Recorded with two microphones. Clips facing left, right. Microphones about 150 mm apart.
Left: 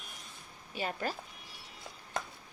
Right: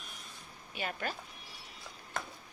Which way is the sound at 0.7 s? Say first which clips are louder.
Left 2 dB; 30° left (ahead or behind).